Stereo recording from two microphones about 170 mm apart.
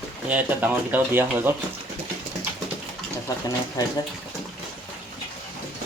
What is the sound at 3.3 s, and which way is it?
Speech, 20° left (ahead or behind).